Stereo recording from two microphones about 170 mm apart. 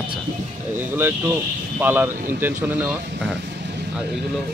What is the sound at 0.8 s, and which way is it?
Speech, 10° right (ahead or behind).